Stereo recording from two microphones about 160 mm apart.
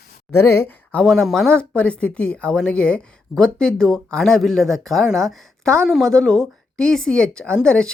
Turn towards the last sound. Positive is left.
turn(degrees=5)  # may be behind; listen again after turning